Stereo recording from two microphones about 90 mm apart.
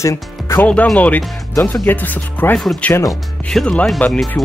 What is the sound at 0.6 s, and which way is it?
Speech, 15° left (ahead or behind).